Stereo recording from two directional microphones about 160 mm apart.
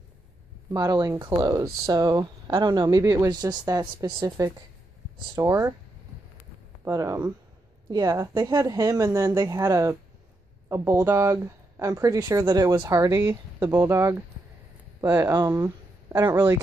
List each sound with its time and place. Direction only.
0.7 s speech: 25° right (ahead or behind)
6.8 s speech: 20° right (ahead or behind)